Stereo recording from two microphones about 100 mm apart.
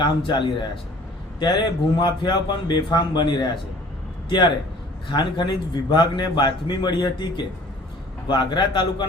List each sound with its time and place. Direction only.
0.0 s a man's voice: 50° left (ahead or behind)